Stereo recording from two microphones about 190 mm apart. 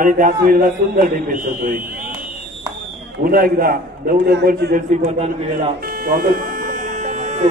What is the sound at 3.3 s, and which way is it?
A man's voice, 50° right (ahead or behind).